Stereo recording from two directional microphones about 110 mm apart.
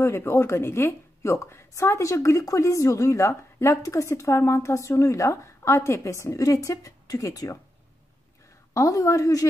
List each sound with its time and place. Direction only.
0.0 s a woman's voice: 25° left (ahead or behind)
8.7 s a woman's voice: 30° left (ahead or behind)